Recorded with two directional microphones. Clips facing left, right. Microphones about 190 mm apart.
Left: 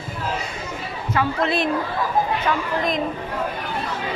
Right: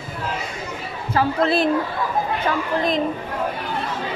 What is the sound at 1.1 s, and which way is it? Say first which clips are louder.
Speech: right 3 dB; 35° right (ahead or behind).